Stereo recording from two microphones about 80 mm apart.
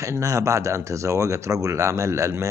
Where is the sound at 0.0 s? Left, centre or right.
Right.